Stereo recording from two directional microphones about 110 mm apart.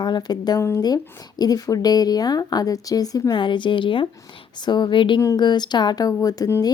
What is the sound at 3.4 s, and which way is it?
A woman's voice, 45° left (ahead or behind).